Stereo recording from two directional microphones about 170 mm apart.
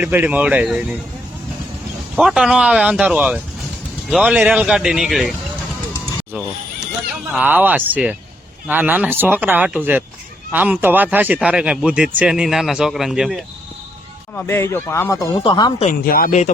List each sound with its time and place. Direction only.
0.0 s speech: 10° right (ahead or behind)
2.1 s a man's voice: 5° right (ahead or behind)
7.3 s a man's voice: 10° right (ahead or behind)
14.3 s speech: 15° left (ahead or behind)
15.9 s speech: 55° left (ahead or behind)